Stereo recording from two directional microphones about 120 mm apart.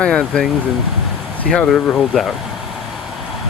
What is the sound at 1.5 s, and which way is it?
Speech, 5° left (ahead or behind).